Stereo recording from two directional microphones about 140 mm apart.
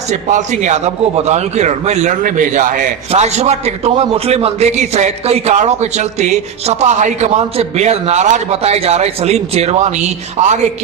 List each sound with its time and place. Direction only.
0.1 s a man's voice: 60° right (ahead or behind)
2.2 s a man's voice: 65° right (ahead or behind)
3.1 s a man's voice: 50° right (ahead or behind)